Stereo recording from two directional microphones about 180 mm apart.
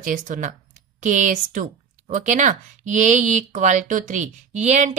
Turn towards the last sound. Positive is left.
turn(degrees=-40)  # may be behind; listen again after turning